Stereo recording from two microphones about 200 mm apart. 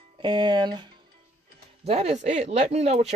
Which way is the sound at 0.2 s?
25° right (ahead or behind).